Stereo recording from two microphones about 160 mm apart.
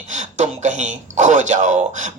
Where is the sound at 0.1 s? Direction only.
50° right (ahead or behind).